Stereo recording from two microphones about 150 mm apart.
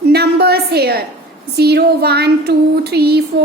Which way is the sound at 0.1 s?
90° right.